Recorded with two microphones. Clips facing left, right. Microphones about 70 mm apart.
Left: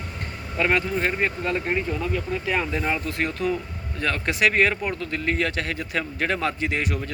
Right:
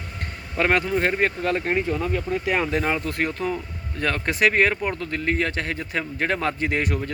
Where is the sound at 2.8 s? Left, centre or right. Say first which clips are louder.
Right 1 dB; right.